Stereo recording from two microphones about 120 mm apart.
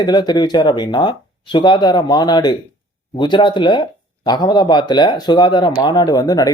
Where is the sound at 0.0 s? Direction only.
35° left (ahead or behind).